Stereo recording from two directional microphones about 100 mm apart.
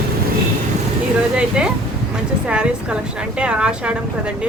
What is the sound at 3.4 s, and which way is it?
Speech, 10° right (ahead or behind).